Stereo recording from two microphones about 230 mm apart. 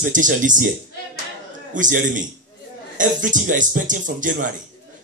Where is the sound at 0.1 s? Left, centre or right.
Right.